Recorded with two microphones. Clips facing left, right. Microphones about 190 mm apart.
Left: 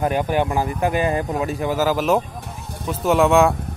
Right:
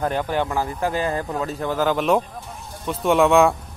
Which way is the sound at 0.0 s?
15° left (ahead or behind).